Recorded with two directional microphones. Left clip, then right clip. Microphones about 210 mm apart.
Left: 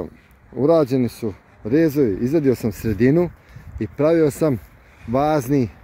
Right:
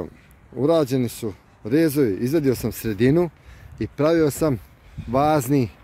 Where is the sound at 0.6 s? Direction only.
Centre (ahead or behind).